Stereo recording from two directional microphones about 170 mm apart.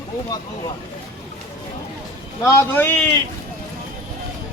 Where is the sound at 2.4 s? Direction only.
15° left (ahead or behind).